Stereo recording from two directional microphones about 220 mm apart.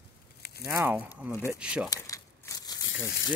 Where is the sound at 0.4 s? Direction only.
45° left (ahead or behind).